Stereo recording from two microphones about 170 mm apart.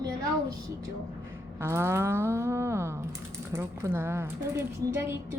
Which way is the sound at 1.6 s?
15° right (ahead or behind).